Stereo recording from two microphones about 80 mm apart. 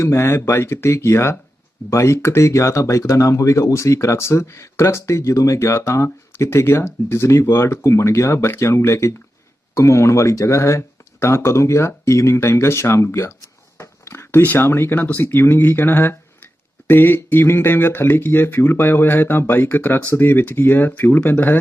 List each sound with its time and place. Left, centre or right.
0.0 s speech: left